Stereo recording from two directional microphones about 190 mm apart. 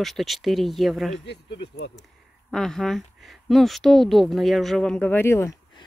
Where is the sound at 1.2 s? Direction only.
65° left (ahead or behind).